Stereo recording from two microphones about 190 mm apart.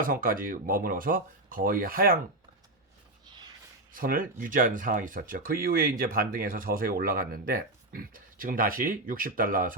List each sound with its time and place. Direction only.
0.0 s speech: 50° right (ahead or behind)
3.9 s speech: 50° right (ahead or behind)